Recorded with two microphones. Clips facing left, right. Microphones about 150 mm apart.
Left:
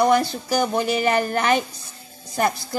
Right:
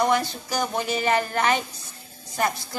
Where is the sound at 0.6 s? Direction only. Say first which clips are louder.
Left 4 dB; 60° left (ahead or behind).